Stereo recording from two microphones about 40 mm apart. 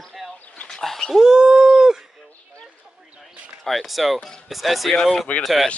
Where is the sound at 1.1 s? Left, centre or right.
Centre.